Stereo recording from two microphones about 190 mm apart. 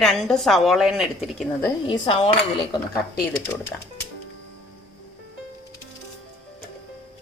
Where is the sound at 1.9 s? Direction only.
30° left (ahead or behind).